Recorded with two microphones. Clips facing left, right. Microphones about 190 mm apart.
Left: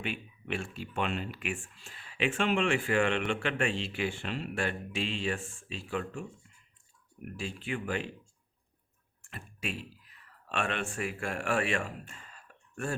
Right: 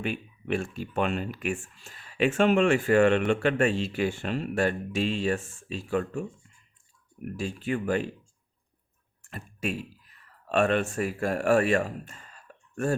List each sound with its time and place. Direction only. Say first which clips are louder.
0.0 s speech: right 6 dB; 45° right (ahead or behind)
7.3 s speech: right 6 dB; 40° right (ahead or behind)
9.2 s speech: right 7 dB; 40° right (ahead or behind)